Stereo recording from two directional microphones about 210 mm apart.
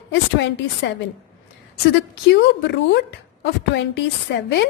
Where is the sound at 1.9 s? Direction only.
55° left (ahead or behind).